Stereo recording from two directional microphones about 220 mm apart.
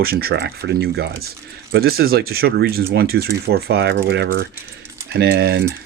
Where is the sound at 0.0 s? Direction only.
45° right (ahead or behind).